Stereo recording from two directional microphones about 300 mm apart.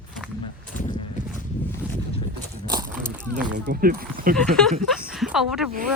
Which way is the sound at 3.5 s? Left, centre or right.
Right.